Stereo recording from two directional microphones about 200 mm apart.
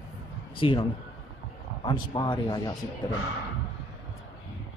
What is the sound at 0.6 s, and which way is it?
Speech, 25° left (ahead or behind).